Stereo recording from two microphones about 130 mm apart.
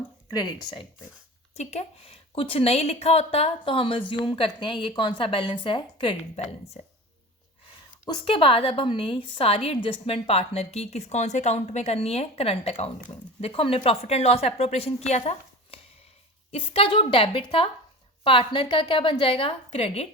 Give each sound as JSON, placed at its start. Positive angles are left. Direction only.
{"t": 0.3, "sound": "speech", "side_deg": 30}
{"t": 1.5, "sound": "a woman's voice", "side_deg": 55}
{"t": 8.0, "sound": "a woman's voice", "side_deg": 40}